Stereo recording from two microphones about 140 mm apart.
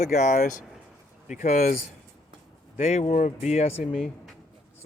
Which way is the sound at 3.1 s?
65° left (ahead or behind).